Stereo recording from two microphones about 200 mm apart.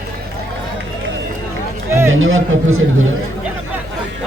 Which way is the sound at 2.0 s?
80° right.